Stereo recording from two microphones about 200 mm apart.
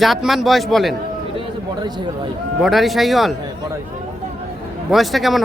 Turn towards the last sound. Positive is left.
turn(degrees=0)  # may be behind; listen again after turning